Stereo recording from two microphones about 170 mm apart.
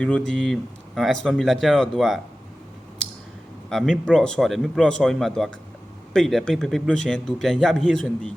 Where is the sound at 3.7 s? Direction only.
5° left (ahead or behind).